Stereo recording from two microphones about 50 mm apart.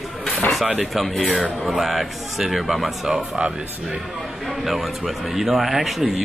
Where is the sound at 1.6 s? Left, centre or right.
Centre.